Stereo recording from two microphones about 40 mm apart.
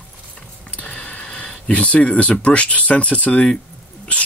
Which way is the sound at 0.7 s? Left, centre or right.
Left.